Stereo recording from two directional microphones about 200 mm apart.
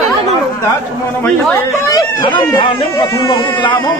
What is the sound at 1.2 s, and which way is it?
Speech, 15° left (ahead or behind).